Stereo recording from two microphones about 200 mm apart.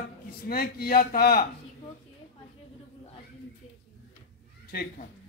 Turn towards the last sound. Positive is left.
turn(degrees=50)  # may be behind; listen again after turning